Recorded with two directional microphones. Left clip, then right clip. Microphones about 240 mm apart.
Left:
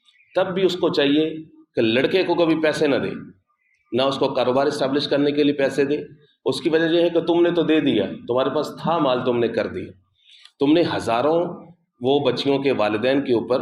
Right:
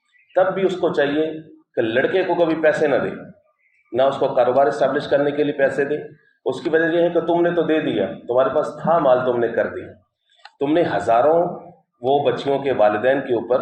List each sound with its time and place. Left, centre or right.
0.3 s a man's voice: left
12.0 s a man's voice: left